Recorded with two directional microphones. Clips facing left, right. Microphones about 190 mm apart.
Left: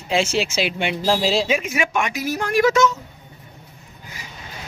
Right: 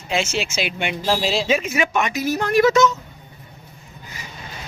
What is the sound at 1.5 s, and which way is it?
A man's voice, 10° left (ahead or behind).